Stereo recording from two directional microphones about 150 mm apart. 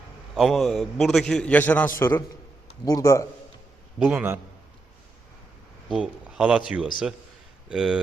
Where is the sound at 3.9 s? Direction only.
10° right (ahead or behind).